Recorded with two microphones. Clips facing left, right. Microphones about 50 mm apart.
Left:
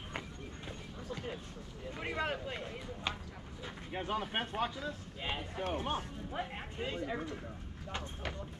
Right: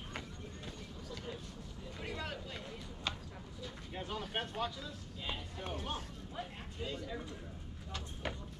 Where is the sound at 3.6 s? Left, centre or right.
Left.